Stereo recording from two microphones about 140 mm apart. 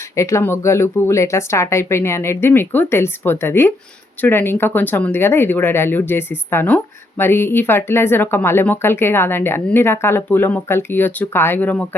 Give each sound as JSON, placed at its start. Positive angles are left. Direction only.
{"t": 0.2, "sound": "speech", "side_deg": 20}